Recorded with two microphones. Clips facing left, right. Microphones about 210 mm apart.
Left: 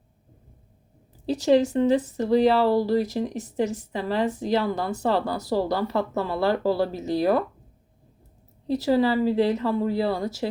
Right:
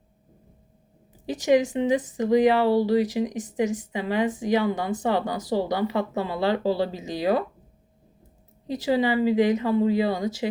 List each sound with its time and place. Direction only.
1.3 s speech: 15° right (ahead or behind)
8.6 s speech: 15° right (ahead or behind)